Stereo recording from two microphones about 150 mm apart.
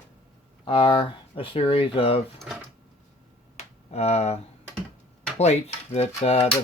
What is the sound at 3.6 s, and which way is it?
Finger snapping, 45° left (ahead or behind).